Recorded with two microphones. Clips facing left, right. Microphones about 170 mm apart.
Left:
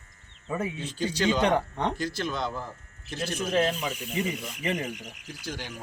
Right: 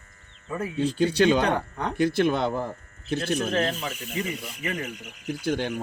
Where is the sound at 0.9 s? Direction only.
60° right (ahead or behind).